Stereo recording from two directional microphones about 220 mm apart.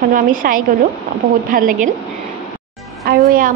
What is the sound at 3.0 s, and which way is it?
Speech, 40° right (ahead or behind).